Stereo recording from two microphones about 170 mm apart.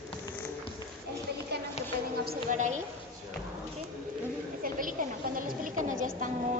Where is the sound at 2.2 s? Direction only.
65° right (ahead or behind).